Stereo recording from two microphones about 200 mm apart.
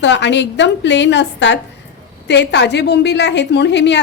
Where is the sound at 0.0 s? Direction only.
60° left (ahead or behind).